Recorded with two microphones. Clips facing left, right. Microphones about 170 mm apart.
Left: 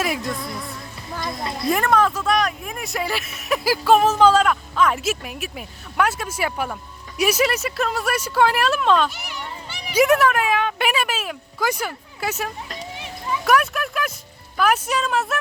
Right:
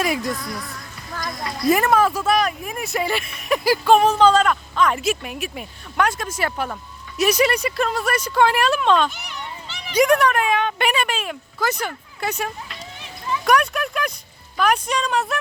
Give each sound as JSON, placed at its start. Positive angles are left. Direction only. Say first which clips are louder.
{"t": 0.0, "sound": "music", "louder": "right 2 dB", "side_deg": 0}
{"t": 0.3, "sound": "music", "louder": "left 1 dB", "side_deg": 25}
{"t": 1.6, "sound": "speech", "louder": "right 2 dB", "side_deg": -5}